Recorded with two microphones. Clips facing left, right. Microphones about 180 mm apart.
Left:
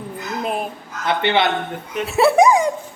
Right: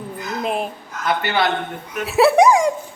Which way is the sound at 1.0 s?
25° left (ahead or behind).